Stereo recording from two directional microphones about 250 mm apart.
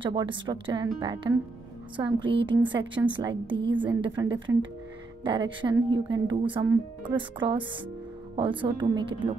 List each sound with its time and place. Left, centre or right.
0.0 s a woman's voice: centre